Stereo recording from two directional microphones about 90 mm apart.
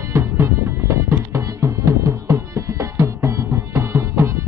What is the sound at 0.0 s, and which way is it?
Music, 30° right (ahead or behind).